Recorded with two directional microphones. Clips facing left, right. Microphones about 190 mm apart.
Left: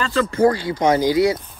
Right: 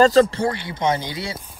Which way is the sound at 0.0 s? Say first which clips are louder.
Right 2 dB; 35° right (ahead or behind).